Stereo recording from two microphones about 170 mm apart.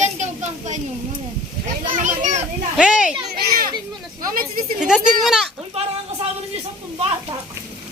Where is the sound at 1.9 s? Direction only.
45° right (ahead or behind).